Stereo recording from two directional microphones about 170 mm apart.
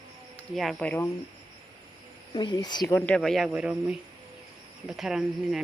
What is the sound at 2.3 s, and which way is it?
Speech, 25° left (ahead or behind).